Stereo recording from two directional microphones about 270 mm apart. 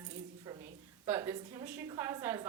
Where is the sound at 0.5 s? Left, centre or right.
Centre.